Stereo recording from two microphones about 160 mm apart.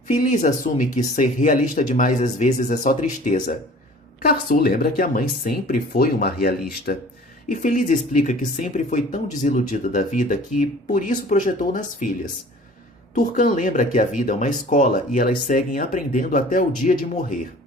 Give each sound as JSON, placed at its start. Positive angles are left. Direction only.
{"t": 0.1, "sound": "speech", "side_deg": 50}
{"t": 4.2, "sound": "speech", "side_deg": 65}
{"t": 7.4, "sound": "speech", "side_deg": 55}
{"t": 13.1, "sound": "speech", "side_deg": 55}